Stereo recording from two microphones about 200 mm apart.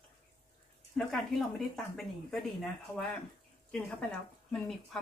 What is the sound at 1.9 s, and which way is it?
Speech, centre (ahead or behind).